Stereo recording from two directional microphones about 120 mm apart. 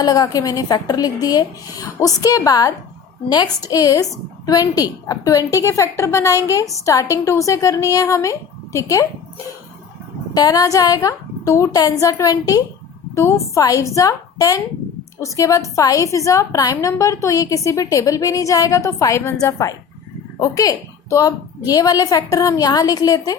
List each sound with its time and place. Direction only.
0.0 s a woman's voice: 35° left (ahead or behind)
10.3 s a woman's voice: 30° left (ahead or behind)